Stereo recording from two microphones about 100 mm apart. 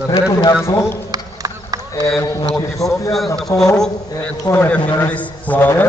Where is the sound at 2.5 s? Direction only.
35° left (ahead or behind).